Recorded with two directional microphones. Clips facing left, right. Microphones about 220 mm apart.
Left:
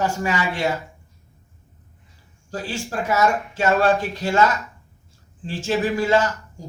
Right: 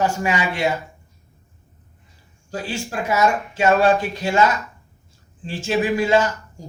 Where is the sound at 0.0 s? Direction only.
15° right (ahead or behind).